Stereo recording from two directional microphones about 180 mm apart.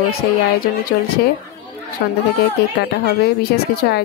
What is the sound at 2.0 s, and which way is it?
Speech, 65° left (ahead or behind).